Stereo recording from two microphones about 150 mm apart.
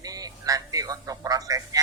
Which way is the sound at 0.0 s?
25° right (ahead or behind).